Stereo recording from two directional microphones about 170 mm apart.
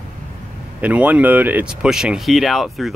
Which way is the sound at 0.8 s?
10° right (ahead or behind).